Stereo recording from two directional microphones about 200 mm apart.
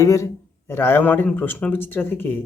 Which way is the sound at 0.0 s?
15° left (ahead or behind).